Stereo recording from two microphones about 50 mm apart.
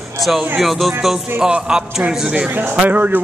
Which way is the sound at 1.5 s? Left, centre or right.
Centre.